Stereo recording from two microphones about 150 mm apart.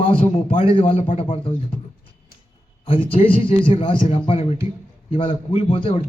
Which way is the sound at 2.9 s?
35° left (ahead or behind).